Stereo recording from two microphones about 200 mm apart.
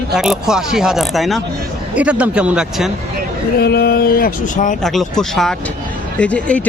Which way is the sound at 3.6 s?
50° left (ahead or behind).